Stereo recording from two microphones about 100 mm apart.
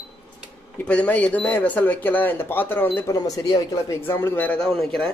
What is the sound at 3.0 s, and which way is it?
Speech, 35° left (ahead or behind).